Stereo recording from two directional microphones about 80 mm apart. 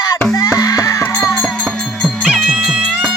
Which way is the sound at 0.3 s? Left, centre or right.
Left.